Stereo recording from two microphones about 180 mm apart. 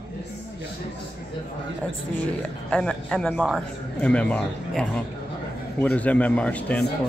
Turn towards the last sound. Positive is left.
turn(degrees=10)  # may be behind; listen again after turning